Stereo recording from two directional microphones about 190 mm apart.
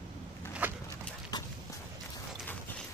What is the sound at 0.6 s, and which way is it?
Dog, 10° right (ahead or behind).